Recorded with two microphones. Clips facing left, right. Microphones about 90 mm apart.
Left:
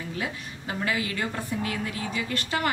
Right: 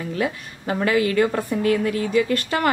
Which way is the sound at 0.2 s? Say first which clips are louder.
Right 10 dB; 60° right (ahead or behind).